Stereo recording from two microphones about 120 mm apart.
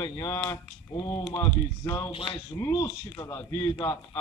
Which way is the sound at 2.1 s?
45° left (ahead or behind).